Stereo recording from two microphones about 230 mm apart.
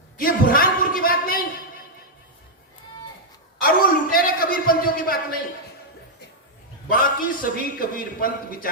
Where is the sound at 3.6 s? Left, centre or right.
Left.